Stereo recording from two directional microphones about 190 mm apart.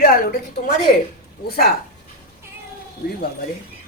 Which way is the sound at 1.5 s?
55° left (ahead or behind).